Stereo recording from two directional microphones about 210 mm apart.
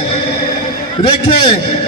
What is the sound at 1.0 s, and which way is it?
Speech, 25° left (ahead or behind).